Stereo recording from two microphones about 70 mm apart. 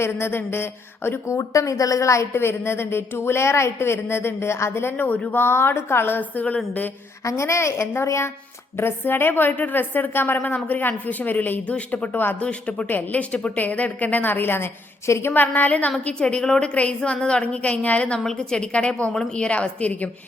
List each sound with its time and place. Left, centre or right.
0.0 s a woman's voice: left
1.4 s a woman's voice: left
7.3 s a woman's voice: left
15.3 s a woman's voice: left